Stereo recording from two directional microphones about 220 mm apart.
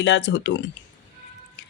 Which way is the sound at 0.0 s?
55° left (ahead or behind).